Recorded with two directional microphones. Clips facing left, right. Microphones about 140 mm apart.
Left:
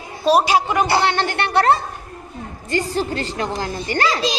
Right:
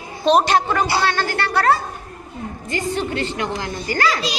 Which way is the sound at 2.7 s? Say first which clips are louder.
Left 2 dB; 35° left (ahead or behind).